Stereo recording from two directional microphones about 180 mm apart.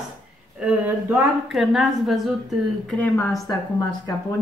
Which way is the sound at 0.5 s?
5° right (ahead or behind).